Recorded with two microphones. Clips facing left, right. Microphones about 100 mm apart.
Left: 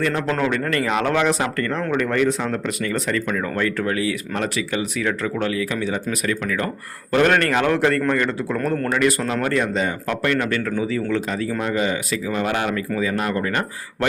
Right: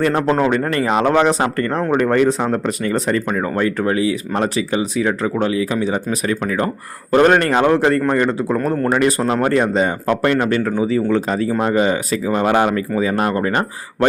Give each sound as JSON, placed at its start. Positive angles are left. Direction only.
{"t": 0.0, "sound": "speech", "side_deg": -45}
{"t": 0.3, "sound": "speech", "side_deg": -30}
{"t": 8.9, "sound": "speech", "side_deg": -30}